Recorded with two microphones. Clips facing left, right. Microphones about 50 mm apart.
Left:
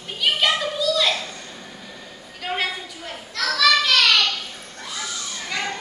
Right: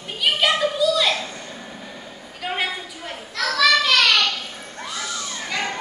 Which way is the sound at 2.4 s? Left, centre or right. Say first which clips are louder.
Even; centre.